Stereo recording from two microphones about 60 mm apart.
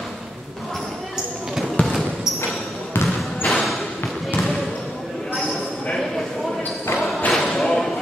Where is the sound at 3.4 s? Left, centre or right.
Centre.